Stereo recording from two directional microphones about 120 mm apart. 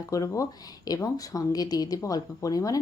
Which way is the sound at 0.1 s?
30° left (ahead or behind).